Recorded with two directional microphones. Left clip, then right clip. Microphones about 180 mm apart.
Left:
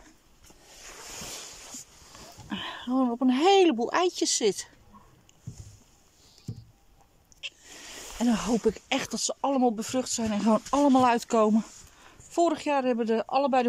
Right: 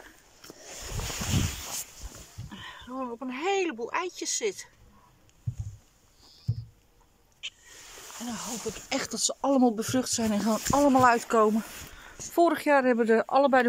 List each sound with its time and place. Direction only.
2.5 s speech: 50° left (ahead or behind); by 4.6 s 30° left (ahead or behind)
8.2 s speech: 75° left (ahead or behind)
8.8 s speech: 10° left (ahead or behind)
10.5 s speech: 20° left (ahead or behind)